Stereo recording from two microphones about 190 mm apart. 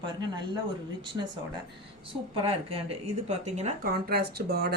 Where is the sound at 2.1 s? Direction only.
30° right (ahead or behind).